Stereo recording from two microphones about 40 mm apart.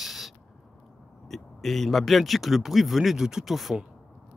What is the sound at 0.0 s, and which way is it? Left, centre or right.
Owl, centre.